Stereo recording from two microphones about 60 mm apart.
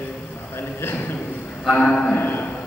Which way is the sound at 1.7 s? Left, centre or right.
Centre.